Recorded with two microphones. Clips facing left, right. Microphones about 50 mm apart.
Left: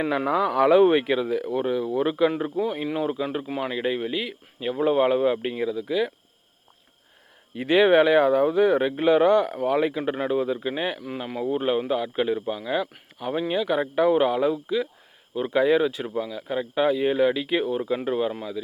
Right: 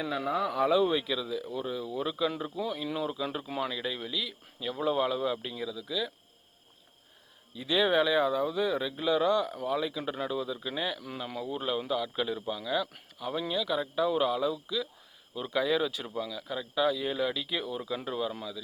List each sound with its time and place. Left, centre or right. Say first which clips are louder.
0.0 s speech: left 7 dB; left
2.4 s speech: left 8 dB; left
3.2 s speech: left 5 dB; left
7.5 s speech: left 9 dB; left
10.0 s speech: left 8 dB; left